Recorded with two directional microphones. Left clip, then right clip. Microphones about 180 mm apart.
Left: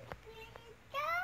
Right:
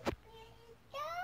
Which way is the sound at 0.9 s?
15° left (ahead or behind).